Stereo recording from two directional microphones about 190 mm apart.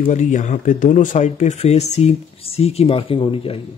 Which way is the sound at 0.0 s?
40° left (ahead or behind).